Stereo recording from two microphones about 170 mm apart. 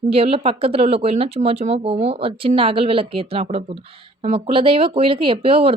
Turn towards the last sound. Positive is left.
turn(degrees=-35)  # may be behind; listen again after turning